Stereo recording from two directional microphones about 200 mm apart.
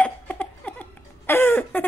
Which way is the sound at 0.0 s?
10° left (ahead or behind).